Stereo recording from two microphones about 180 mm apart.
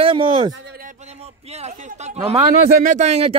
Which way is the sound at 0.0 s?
30° right (ahead or behind).